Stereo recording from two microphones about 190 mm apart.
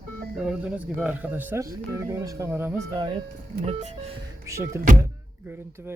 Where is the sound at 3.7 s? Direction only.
35° right (ahead or behind).